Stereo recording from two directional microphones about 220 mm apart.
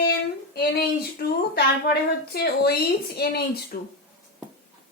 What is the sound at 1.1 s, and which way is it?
Speech, 45° left (ahead or behind).